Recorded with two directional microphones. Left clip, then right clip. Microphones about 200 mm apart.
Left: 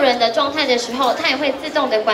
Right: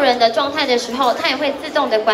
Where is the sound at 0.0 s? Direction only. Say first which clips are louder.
Right 1 dB; 25° right (ahead or behind).